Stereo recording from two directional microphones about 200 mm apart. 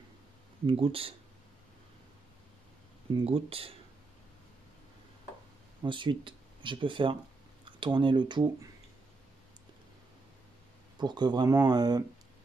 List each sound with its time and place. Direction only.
0.7 s speech: 30° right (ahead or behind)
3.2 s speech: 30° right (ahead or behind)
5.8 s speech: 25° right (ahead or behind)
11.0 s speech: 20° right (ahead or behind)